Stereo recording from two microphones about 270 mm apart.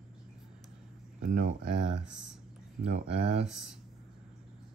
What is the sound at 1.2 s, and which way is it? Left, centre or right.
Speech, right.